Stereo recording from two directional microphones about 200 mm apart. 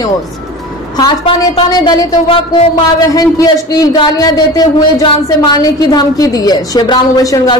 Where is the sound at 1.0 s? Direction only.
20° left (ahead or behind).